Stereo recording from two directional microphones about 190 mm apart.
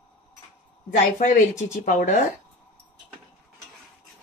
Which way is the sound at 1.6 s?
40° left (ahead or behind).